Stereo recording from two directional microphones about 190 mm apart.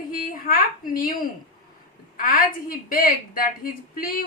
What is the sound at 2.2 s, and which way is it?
Speech, 50° left (ahead or behind).